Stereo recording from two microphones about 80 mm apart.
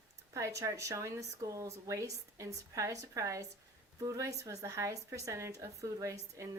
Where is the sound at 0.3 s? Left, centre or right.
Right.